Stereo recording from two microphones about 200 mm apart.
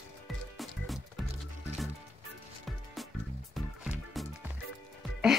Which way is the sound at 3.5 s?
Centre (ahead or behind).